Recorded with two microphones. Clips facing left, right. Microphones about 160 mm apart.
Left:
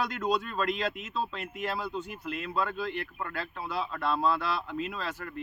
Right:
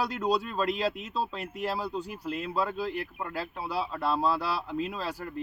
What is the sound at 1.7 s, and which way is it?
Speech, 35° right (ahead or behind).